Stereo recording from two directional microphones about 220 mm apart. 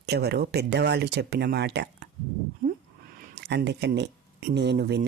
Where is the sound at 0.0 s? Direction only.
50° right (ahead or behind).